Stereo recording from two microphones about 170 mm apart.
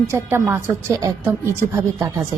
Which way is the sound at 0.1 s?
15° right (ahead or behind).